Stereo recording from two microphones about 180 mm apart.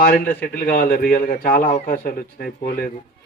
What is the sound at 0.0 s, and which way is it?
A man's voice, 55° left (ahead or behind).